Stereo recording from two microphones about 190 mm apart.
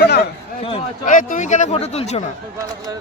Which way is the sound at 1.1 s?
45° left (ahead or behind).